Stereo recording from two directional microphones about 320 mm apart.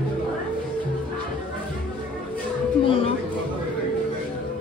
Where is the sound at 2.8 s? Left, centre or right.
Centre.